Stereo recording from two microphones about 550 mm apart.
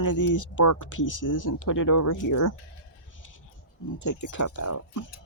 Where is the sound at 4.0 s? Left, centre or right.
Left.